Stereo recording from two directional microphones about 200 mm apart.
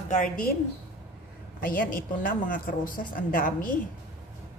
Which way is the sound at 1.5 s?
45° left (ahead or behind).